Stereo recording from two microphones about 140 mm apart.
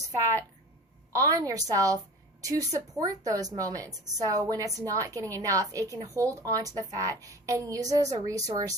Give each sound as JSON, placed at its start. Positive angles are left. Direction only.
{"t": 0.2, "sound": "a woman's voice", "side_deg": -20}